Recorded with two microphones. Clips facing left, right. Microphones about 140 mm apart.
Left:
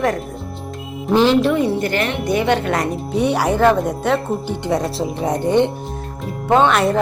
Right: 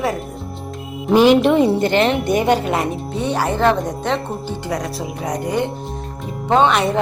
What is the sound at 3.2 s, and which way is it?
Speech, 10° left (ahead or behind).